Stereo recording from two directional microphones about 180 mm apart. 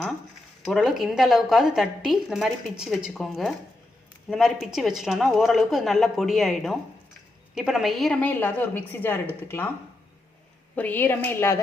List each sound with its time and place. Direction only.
0.6 s a woman's voice: centre (ahead or behind)
10.8 s a woman's voice: 10° left (ahead or behind)